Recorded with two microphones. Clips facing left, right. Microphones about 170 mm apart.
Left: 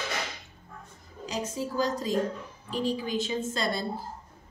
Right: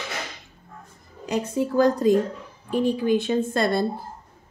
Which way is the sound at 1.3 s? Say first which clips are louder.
Right 8 dB; 60° right (ahead or behind).